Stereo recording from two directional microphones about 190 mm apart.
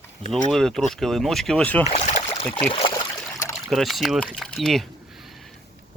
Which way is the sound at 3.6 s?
Centre (ahead or behind).